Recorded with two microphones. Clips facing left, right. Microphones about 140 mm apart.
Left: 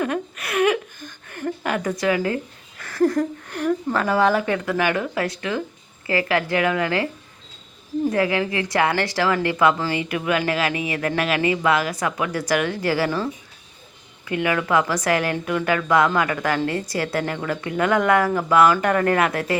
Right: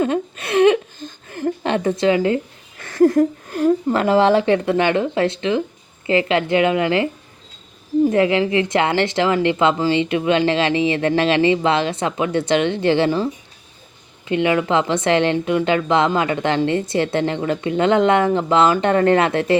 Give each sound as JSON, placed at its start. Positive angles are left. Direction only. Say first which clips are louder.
{"t": 0.0, "sound": "a sound", "louder": "right 5 dB", "side_deg": -25}
{"t": 3.0, "sound": "a woman's voice", "louder": "right 6 dB", "side_deg": -25}
{"t": 8.1, "sound": "a woman's voice", "louder": "right 5 dB", "side_deg": -25}
{"t": 14.3, "sound": "a woman's voice", "louder": "right 4 dB", "side_deg": -25}